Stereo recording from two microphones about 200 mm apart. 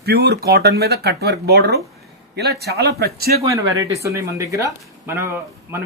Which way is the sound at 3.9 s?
15° right (ahead or behind).